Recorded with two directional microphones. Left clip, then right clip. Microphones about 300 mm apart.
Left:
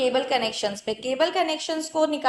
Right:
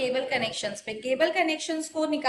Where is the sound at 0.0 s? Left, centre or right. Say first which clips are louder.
Left 4 dB; centre.